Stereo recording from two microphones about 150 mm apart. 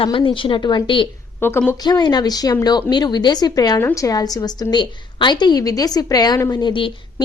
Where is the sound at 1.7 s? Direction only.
25° left (ahead or behind).